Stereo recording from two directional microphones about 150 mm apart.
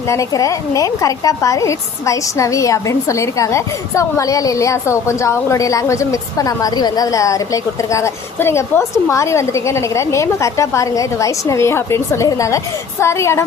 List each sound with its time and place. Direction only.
0.1 s a woman's voice: 20° left (ahead or behind)